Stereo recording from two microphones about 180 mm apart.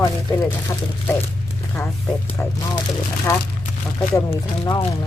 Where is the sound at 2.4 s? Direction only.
15° left (ahead or behind).